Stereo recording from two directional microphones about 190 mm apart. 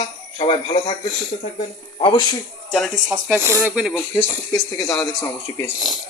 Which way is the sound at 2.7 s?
Centre (ahead or behind).